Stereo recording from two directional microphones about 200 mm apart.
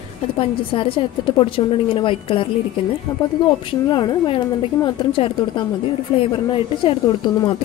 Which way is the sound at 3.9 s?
25° left (ahead or behind).